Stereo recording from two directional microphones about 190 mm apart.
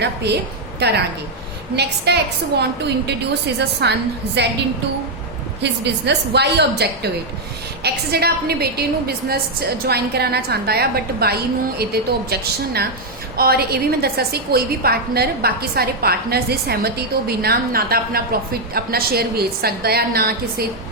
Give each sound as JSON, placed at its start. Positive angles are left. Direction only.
{"t": 0.0, "sound": "a woman's voice", "side_deg": -65}
{"t": 5.8, "sound": "a woman's voice", "side_deg": -60}